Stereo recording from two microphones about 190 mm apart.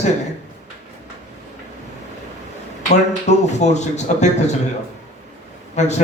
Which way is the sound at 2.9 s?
35° left (ahead or behind).